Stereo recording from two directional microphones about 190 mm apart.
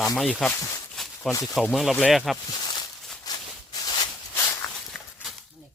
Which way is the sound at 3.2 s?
20° left (ahead or behind).